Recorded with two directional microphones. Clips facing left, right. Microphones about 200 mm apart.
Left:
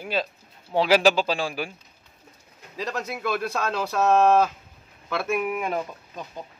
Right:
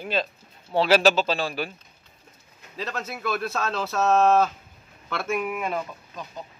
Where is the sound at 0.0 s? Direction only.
10° left (ahead or behind).